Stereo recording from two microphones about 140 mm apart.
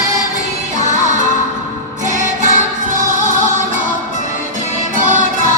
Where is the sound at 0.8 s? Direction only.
60° right (ahead or behind).